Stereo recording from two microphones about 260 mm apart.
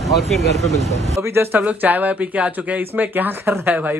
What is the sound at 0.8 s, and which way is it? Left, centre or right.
Speech, right.